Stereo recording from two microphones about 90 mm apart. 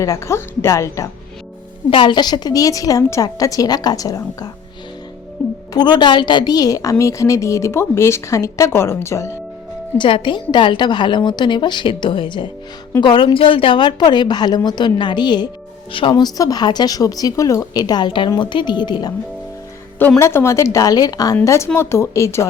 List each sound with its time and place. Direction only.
0.0 s a woman's voice: 35° left (ahead or behind)
1.9 s a woman's voice: 65° left (ahead or behind); by 4.5 s 40° left (ahead or behind)
5.7 s a woman's voice: 55° left (ahead or behind); by 9.4 s 30° left (ahead or behind)
10.0 s a woman's voice: 65° left (ahead or behind)
15.9 s a woman's voice: 70° left (ahead or behind); by 19.1 s 55° left (ahead or behind)
20.0 s a woman's voice: 25° left (ahead or behind); by 21.3 s 45° left (ahead or behind)
21.4 s a woman's voice: 30° left (ahead or behind)